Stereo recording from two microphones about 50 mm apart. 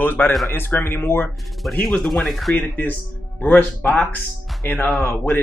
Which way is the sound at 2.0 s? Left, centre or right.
Centre.